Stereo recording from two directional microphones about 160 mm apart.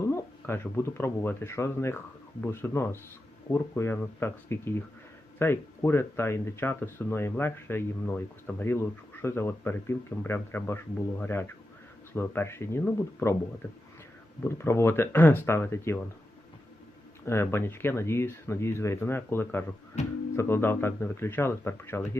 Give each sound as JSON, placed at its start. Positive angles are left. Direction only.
{"t": 0.0, "sound": "speech", "side_deg": 15}
{"t": 17.2, "sound": "speech", "side_deg": 15}